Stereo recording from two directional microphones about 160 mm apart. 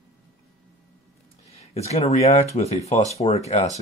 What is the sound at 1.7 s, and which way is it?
Speech, 40° left (ahead or behind).